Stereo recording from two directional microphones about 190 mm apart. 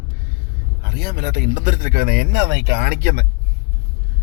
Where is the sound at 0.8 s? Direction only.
55° right (ahead or behind).